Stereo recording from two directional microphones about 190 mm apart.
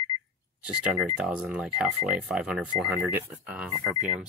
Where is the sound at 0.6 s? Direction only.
5° right (ahead or behind).